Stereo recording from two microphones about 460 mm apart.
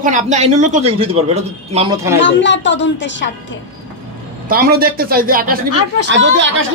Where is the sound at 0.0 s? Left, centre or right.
Centre.